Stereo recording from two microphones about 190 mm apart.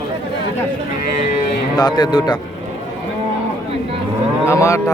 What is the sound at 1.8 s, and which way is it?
Speech, 20° left (ahead or behind).